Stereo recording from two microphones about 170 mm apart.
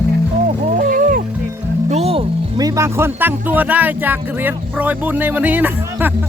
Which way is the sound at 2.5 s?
20° right (ahead or behind).